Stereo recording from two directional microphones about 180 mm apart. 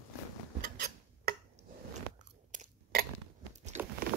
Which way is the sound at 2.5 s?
45° right (ahead or behind).